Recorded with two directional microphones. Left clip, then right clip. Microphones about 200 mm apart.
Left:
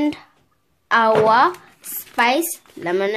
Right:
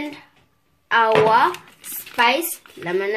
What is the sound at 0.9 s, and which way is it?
Speech, 45° left (ahead or behind).